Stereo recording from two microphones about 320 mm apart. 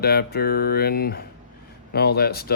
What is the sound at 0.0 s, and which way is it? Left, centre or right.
Speech, left.